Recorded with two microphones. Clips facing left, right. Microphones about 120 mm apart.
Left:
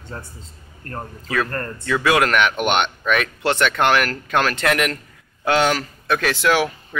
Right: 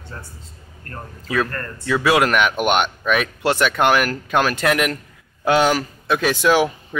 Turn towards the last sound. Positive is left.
turn(degrees=-15)  # may be behind; listen again after turning